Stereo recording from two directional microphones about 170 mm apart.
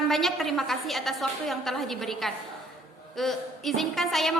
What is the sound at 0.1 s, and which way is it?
A woman's voice, centre (ahead or behind).